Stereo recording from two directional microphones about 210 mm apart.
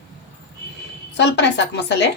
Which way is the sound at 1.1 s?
55° left (ahead or behind).